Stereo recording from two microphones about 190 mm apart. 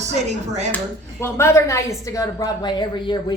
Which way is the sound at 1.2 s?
15° left (ahead or behind).